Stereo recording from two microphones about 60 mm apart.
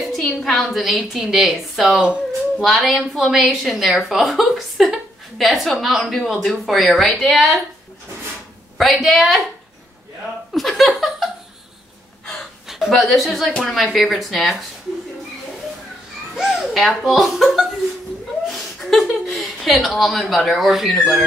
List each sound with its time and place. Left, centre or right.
0.0 s a sound: centre
0.4 s a woman's voice: centre
2.0 s speech: centre
2.6 s a woman's voice: centre
8.7 s a woman's voice: centre
10.5 s speech: centre
12.6 s a sound: centre
12.9 s a woman's voice: centre
16.3 s a woman's voice: centre